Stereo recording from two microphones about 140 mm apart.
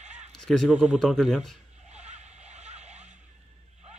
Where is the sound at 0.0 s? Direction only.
55° right (ahead or behind).